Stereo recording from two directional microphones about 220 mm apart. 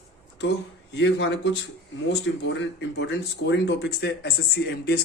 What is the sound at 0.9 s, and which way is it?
Speech, 55° left (ahead or behind).